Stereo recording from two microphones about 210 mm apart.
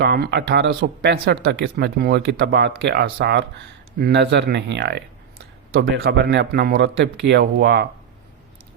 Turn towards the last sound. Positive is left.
turn(degrees=-50)  # may be behind; listen again after turning